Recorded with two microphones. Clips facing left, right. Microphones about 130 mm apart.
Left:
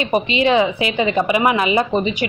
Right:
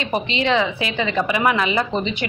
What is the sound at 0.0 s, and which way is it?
A woman's voice, 15° left (ahead or behind).